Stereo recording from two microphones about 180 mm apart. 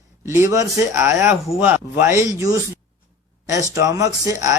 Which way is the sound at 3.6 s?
20° right (ahead or behind).